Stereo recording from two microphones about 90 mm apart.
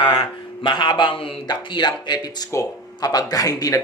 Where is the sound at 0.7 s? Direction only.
55° left (ahead or behind).